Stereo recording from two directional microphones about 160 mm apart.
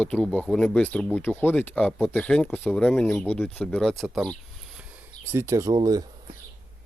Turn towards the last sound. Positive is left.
turn(degrees=-20)  # may be behind; listen again after turning